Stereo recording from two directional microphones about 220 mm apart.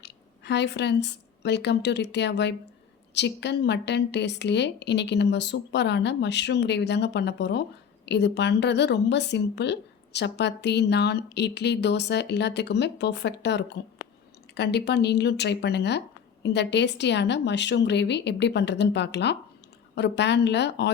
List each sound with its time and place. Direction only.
0.0 s a woman's voice: 50° left (ahead or behind)